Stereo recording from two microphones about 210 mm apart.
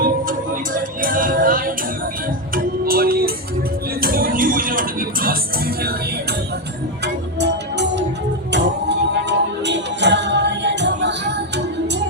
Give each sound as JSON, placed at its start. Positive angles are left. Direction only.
{"t": 0.0, "sound": "music", "side_deg": -40}
{"t": 7.0, "sound": "music", "side_deg": -55}